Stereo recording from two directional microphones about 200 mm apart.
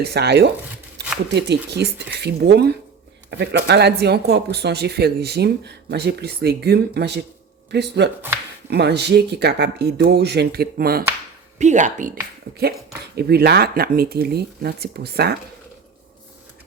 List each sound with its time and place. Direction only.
0.0 s speech: 55° right (ahead or behind)
11.5 s speech: 35° right (ahead or behind)
13.1 s speech: 50° right (ahead or behind)